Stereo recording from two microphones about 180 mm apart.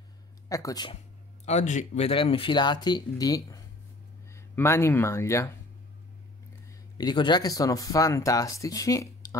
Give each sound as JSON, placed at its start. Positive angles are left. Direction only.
{"t": 0.5, "sound": "speech", "side_deg": 20}
{"t": 1.4, "sound": "speech", "side_deg": 40}
{"t": 7.0, "sound": "speech", "side_deg": 25}